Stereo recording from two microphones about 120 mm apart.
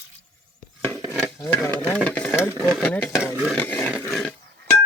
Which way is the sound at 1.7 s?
15° left (ahead or behind).